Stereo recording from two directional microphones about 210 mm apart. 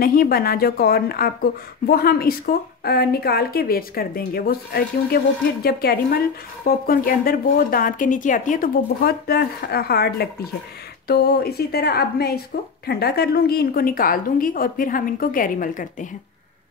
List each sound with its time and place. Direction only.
0.0 s a woman's voice: 45° left (ahead or behind)